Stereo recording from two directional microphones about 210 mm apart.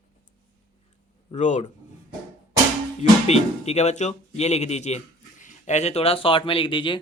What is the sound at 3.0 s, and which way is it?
Speech, 30° left (ahead or behind).